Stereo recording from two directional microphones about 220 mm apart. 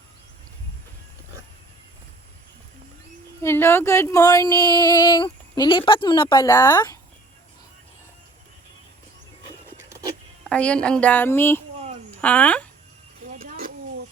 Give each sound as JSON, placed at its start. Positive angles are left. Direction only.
{"t": 3.4, "sound": "speech", "side_deg": 10}
{"t": 10.5, "sound": "speech", "side_deg": 5}
{"t": 13.4, "sound": "a sound", "side_deg": -40}